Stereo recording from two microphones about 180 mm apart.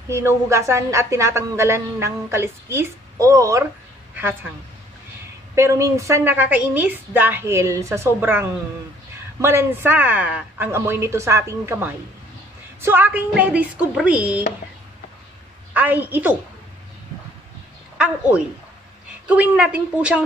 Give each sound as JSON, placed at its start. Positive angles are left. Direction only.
{"t": 0.1, "sound": "a woman's voice", "side_deg": -15}
{"t": 5.5, "sound": "a woman's voice", "side_deg": -15}
{"t": 15.7, "sound": "a woman's voice", "side_deg": -10}
{"t": 17.9, "sound": "a woman's voice", "side_deg": -5}